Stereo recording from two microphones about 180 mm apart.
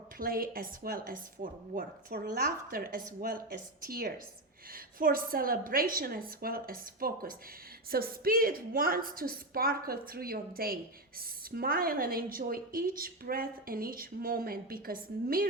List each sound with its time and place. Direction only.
0.2 s a woman's voice: 55° right (ahead or behind)